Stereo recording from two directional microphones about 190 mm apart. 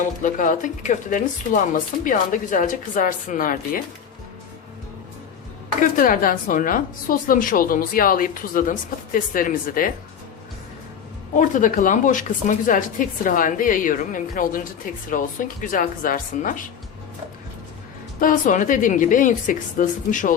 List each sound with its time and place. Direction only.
0.2 s speech: 45° left (ahead or behind)
5.8 s speech: 45° left (ahead or behind)
11.3 s speech: 45° left (ahead or behind)
18.2 s speech: 45° left (ahead or behind)